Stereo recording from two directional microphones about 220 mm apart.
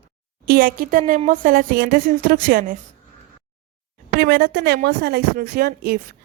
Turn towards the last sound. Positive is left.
turn(degrees=-45)  # may be behind; listen again after turning